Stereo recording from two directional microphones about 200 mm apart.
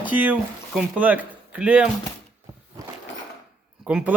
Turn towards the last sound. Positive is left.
turn(degrees=-5)  # may be behind; listen again after turning